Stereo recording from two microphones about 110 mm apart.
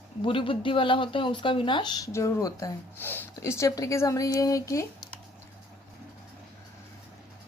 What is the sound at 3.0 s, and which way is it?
Speech, 20° left (ahead or behind).